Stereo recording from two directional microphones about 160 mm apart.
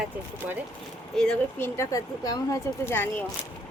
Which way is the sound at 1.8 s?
20° left (ahead or behind).